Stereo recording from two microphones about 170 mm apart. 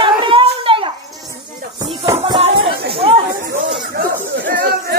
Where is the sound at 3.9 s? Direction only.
75° right (ahead or behind).